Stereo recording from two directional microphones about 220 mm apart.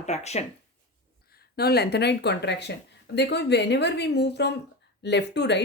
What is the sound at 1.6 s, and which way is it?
Speech, 45° left (ahead or behind).